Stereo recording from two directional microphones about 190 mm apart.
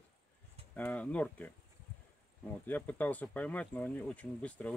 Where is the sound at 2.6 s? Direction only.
10° left (ahead or behind).